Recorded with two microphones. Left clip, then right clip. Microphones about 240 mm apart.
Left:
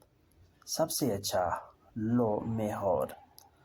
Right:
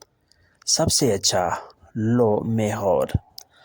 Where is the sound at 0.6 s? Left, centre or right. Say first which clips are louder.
Right 11 dB; right.